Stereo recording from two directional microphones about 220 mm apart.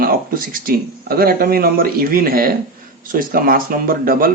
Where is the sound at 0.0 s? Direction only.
40° right (ahead or behind).